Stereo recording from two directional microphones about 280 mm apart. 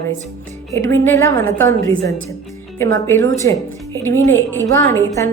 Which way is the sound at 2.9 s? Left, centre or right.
Centre.